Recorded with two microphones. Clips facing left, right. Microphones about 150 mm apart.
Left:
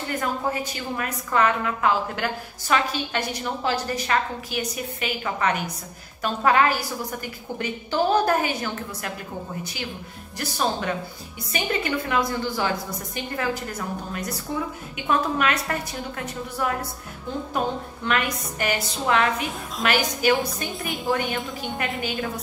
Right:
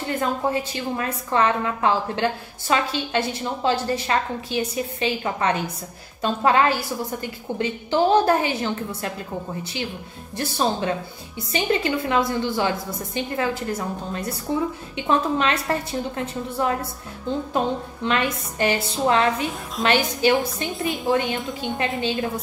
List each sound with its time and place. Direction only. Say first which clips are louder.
0.1 s a woman's voice: right 3 dB; 25° right (ahead or behind)
10.3 s a woman's voice: right 3 dB; 25° right (ahead or behind)
18.0 s a woman's voice: right 2 dB; 25° right (ahead or behind)